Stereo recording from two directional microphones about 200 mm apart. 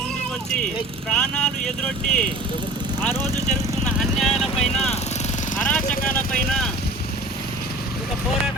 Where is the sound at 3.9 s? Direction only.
Centre (ahead or behind).